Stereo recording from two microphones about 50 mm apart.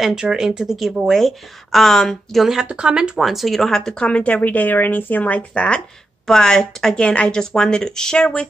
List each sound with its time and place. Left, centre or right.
0.0 s speech: centre
0.7 s a woman's voice: centre
2.6 s speech: centre
3.2 s a woman's voice: centre
3.7 s speech: centre
4.1 s speech: left
6.2 s speech: centre